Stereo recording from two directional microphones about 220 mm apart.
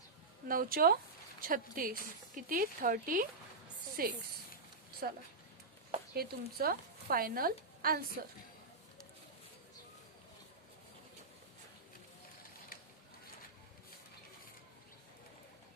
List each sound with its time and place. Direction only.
0.4 s a woman's voice: 40° right (ahead or behind)